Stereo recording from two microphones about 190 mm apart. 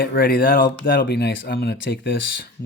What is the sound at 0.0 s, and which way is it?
Speech, 50° left (ahead or behind).